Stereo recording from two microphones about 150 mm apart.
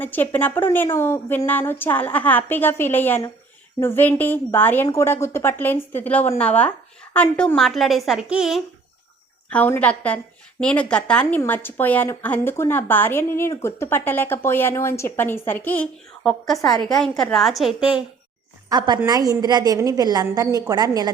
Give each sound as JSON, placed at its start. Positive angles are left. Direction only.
{"t": 0.0, "sound": "a woman's voice", "side_deg": 15}
{"t": 9.5, "sound": "a woman's voice", "side_deg": 10}
{"t": 18.7, "sound": "a woman's voice", "side_deg": -30}